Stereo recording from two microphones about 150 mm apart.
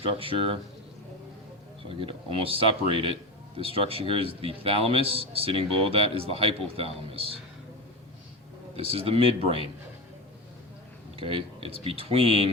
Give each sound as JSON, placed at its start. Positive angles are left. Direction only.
{"t": 0.0, "sound": "a man's voice", "side_deg": -40}
{"t": 2.0, "sound": "a man's voice", "side_deg": -40}
{"t": 8.7, "sound": "a man's voice", "side_deg": -40}
{"t": 11.2, "sound": "a man's voice", "side_deg": -35}